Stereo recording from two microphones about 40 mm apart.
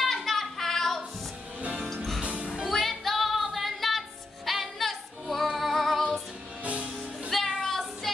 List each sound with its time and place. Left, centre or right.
0.0 s child singing: centre
1.8 s music: centre
6.6 s music: right
7.3 s music: centre